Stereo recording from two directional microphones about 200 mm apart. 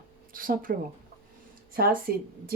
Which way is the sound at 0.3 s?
45° right (ahead or behind).